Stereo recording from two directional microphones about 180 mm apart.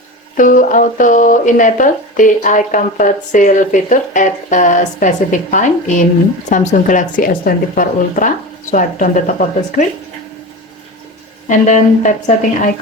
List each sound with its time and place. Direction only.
0.3 s speech: 45° left (ahead or behind)
11.4 s speech: 45° left (ahead or behind)